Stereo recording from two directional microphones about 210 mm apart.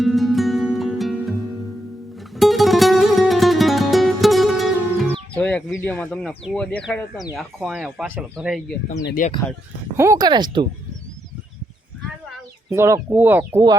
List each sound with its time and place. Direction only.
0.0 s music: centre (ahead or behind)
5.4 s speech: 5° left (ahead or behind)
9.2 s speech: 35° left (ahead or behind)
10.0 s speech: 15° right (ahead or behind)
12.7 s speech: 10° right (ahead or behind)